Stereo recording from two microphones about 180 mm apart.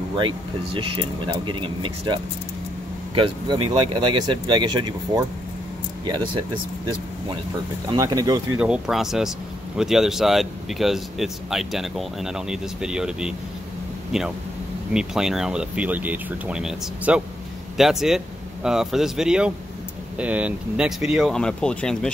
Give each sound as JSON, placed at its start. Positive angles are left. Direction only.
{"t": 0.1, "sound": "speech", "side_deg": -30}
{"t": 3.2, "sound": "speech", "side_deg": -30}
{"t": 7.9, "sound": "speech", "side_deg": -20}
{"t": 8.5, "sound": "speech", "side_deg": -5}